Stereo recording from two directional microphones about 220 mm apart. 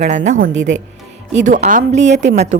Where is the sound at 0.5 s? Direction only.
55° right (ahead or behind).